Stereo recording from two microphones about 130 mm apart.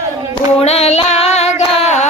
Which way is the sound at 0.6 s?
55° left (ahead or behind).